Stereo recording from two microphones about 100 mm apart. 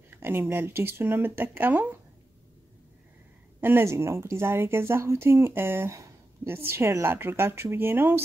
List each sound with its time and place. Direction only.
0.1 s speech: 20° right (ahead or behind)
3.6 s speech: 25° right (ahead or behind)